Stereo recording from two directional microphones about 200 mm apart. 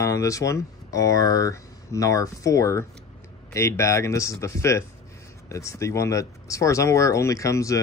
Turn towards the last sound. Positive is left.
turn(degrees=15)  # may be behind; listen again after turning